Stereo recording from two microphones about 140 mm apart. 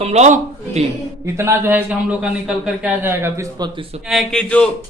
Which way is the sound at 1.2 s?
20° right (ahead or behind).